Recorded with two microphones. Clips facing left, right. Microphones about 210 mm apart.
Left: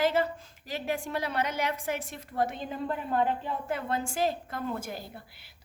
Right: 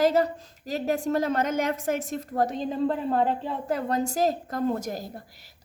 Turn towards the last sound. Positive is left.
turn(degrees=-40)  # may be behind; listen again after turning